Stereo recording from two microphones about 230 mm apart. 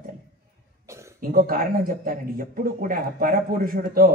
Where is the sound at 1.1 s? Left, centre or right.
Right.